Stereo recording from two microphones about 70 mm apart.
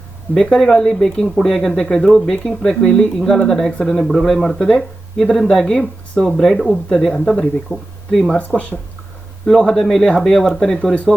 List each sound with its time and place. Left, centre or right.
0.3 s speech: centre
8.4 s speech: left
9.5 s speech: centre